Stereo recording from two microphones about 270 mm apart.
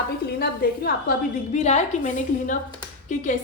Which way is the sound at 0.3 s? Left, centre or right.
Left.